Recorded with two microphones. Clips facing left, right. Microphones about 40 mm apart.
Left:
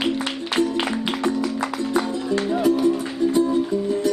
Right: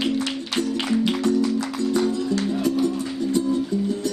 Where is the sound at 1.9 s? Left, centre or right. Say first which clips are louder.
Right 1 dB; left.